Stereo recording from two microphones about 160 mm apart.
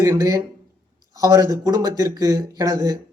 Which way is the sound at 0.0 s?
20° right (ahead or behind).